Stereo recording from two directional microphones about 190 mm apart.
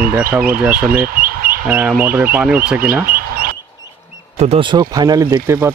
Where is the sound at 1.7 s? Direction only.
10° right (ahead or behind).